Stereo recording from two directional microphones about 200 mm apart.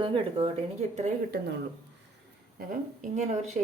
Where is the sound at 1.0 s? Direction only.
40° right (ahead or behind).